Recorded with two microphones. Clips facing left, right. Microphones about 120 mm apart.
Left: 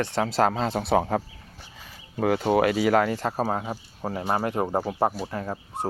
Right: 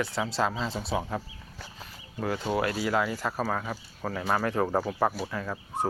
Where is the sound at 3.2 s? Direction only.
35° left (ahead or behind).